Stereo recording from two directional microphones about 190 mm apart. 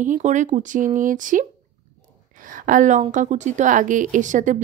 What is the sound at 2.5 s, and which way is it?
Speech, 45° right (ahead or behind).